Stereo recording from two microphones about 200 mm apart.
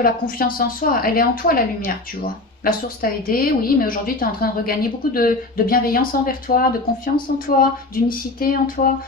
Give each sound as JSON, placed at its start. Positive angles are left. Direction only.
{"t": 0.0, "sound": "speech", "side_deg": 45}